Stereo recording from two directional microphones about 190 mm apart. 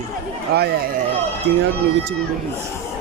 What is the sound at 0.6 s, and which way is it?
Speech, 50° right (ahead or behind).